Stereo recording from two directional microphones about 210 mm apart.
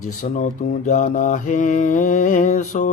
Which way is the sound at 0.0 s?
40° left (ahead or behind).